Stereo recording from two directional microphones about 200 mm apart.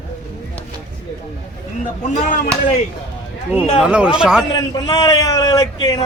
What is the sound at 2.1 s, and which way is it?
Speech, 40° left (ahead or behind).